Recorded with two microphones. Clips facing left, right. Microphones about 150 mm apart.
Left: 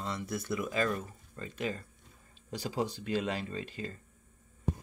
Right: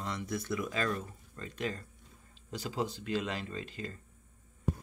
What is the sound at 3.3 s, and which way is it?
Speech, 35° left (ahead or behind).